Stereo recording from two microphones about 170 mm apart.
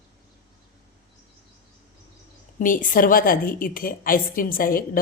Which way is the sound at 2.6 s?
50° left (ahead or behind).